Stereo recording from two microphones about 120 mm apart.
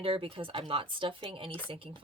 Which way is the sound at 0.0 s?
50° right (ahead or behind).